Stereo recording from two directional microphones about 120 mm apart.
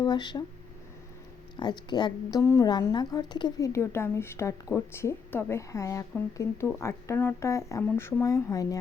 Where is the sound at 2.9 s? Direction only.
35° left (ahead or behind).